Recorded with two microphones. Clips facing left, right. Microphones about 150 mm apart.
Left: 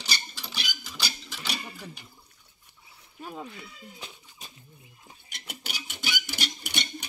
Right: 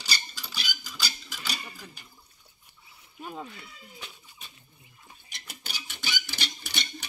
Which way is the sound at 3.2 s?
Centre (ahead or behind).